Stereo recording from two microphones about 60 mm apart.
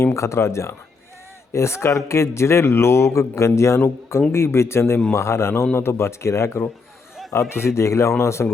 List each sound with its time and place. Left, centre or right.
0.0 s a man's voice: left